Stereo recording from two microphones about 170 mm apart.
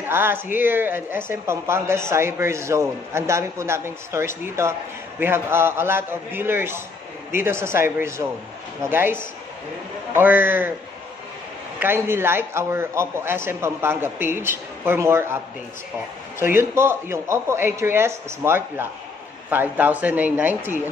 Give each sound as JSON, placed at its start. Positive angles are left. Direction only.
{"t": 0.1, "sound": "speech", "side_deg": -15}
{"t": 11.8, "sound": "speech", "side_deg": -15}
{"t": 16.3, "sound": "speech", "side_deg": -15}